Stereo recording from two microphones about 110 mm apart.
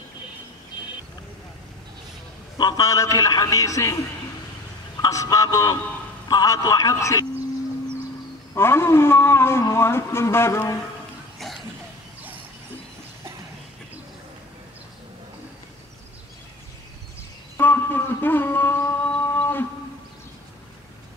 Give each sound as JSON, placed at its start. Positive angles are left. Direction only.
{"t": 2.5, "sound": "a man's voice", "side_deg": 35}
{"t": 5.0, "sound": "a man's voice", "side_deg": 30}
{"t": 8.5, "sound": "a man's voice", "side_deg": 20}
{"t": 11.3, "sound": "cough", "side_deg": 0}
{"t": 17.6, "sound": "a sound", "side_deg": 20}